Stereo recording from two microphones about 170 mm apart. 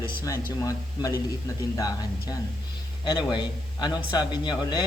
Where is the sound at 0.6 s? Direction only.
20° left (ahead or behind).